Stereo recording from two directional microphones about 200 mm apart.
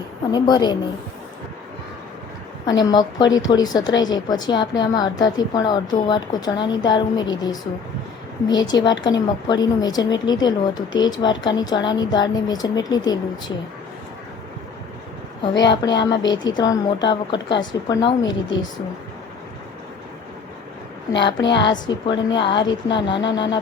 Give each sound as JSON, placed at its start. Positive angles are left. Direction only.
{"t": 0.3, "sound": "a woman's voice", "side_deg": 20}
{"t": 2.6, "sound": "a woman's voice", "side_deg": 20}
{"t": 15.7, "sound": "a woman's voice", "side_deg": 20}
{"t": 21.4, "sound": "a woman's voice", "side_deg": 60}
{"t": 21.8, "sound": "a woman's voice", "side_deg": 20}